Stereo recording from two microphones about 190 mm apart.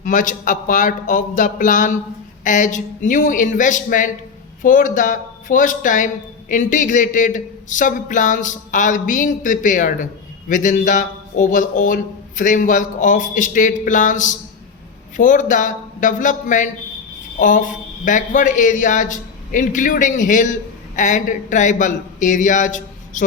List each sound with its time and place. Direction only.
0.0 s a man's voice: 45° left (ahead or behind)